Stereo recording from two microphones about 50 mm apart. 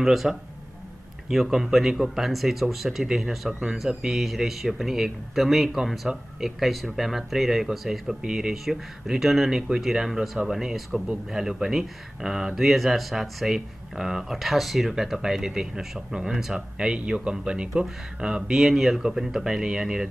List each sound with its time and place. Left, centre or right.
0.0 s speech: centre
6.1 s speech: centre
6.4 s speech: centre
8.2 s speech: centre
18.6 s speech: centre